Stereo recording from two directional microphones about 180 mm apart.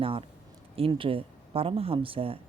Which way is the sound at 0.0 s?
30° right (ahead or behind).